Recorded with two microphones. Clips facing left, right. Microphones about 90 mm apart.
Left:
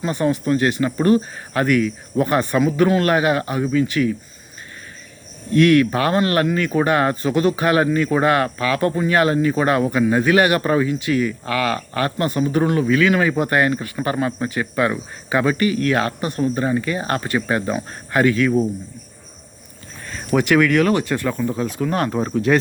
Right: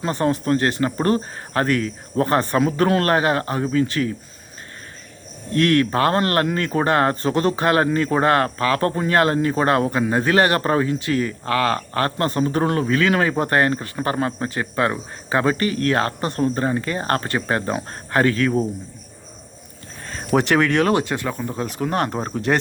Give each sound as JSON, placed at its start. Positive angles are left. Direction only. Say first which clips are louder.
{"t": 0.1, "sound": "speech", "louder": "even", "side_deg": -40}
{"t": 5.5, "sound": "speech", "louder": "left 3 dB", "side_deg": -35}
{"t": 20.1, "sound": "speech", "louder": "left 1 dB", "side_deg": -35}